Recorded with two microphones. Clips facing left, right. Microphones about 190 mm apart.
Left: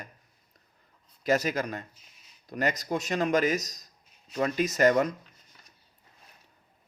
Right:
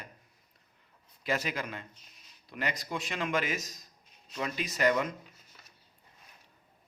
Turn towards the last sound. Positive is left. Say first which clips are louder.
# left 6 dB
turn(degrees=45)  # may be behind; listen again after turning